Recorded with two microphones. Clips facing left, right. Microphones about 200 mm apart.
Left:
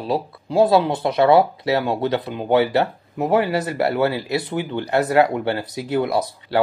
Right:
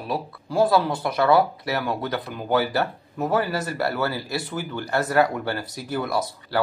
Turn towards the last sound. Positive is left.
turn(degrees=20)  # may be behind; listen again after turning